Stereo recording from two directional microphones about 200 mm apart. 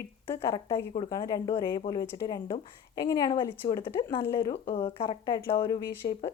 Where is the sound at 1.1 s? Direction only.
15° left (ahead or behind).